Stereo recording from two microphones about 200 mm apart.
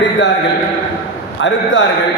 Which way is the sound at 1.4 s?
70° left (ahead or behind).